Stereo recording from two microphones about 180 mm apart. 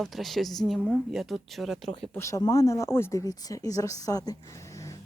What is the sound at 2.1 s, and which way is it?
Speech, 15° left (ahead or behind).